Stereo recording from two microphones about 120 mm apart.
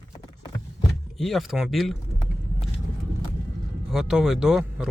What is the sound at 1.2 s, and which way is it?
Speech, centre (ahead or behind).